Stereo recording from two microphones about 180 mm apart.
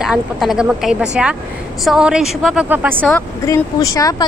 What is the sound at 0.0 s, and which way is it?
Speech, centre (ahead or behind).